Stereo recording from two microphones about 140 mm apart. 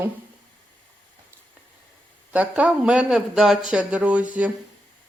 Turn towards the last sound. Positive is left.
turn(degrees=-10)  # may be behind; listen again after turning